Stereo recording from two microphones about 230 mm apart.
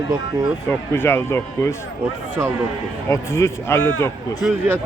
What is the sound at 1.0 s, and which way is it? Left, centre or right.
Speech, centre.